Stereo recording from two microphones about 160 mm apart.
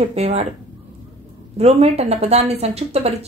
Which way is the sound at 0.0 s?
40° right (ahead or behind).